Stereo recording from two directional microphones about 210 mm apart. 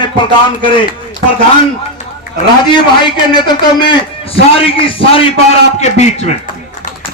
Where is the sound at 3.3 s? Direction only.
20° left (ahead or behind).